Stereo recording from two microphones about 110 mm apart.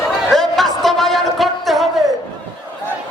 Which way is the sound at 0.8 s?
Centre (ahead or behind).